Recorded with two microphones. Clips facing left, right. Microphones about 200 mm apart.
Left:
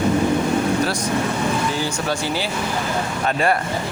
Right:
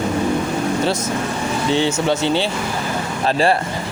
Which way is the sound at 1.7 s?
25° right (ahead or behind).